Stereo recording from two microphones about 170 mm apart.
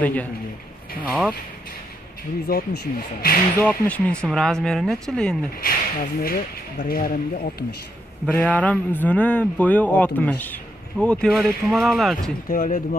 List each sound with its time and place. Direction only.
0.0 s speech: 10° left (ahead or behind)
2.4 s speech: 65° left (ahead or behind)
3.6 s speech: 10° left (ahead or behind)
5.6 s speech: 60° left (ahead or behind)
8.3 s speech: 10° left (ahead or behind)
12.4 s speech: 55° left (ahead or behind)